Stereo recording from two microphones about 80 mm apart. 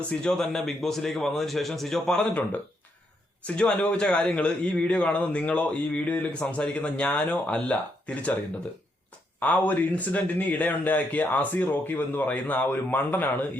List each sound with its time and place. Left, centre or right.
0.1 s speech: centre
3.4 s speech: centre
9.4 s speech: centre